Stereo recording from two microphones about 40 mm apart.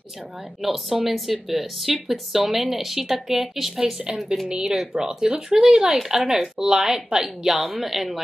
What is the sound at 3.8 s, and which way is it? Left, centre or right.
Speech, centre.